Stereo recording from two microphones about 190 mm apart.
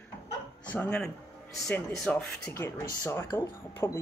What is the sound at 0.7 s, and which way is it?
Speech, 5° left (ahead or behind).